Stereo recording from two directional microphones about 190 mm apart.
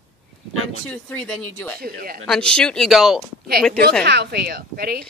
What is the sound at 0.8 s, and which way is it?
Speech, 5° left (ahead or behind).